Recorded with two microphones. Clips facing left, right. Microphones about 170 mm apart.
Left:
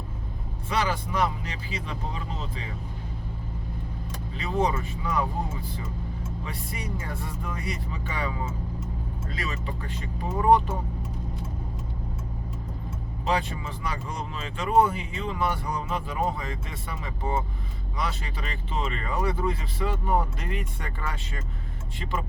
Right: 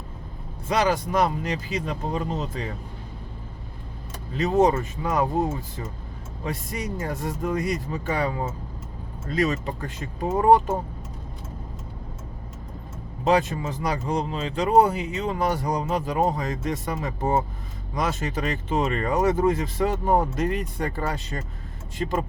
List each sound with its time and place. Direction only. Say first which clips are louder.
0.7 s speech: right 5 dB; 40° right (ahead or behind)
4.4 s speech: right 7 dB; 45° right (ahead or behind)
13.2 s speech: right 7 dB; 45° right (ahead or behind)